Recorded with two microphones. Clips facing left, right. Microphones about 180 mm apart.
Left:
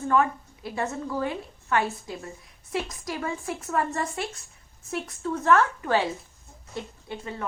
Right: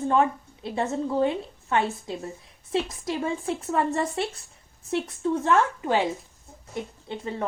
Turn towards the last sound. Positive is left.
turn(degrees=-30)  # may be behind; listen again after turning